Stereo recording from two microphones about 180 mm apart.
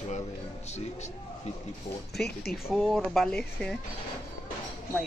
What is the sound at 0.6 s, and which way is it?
Speech, 40° left (ahead or behind).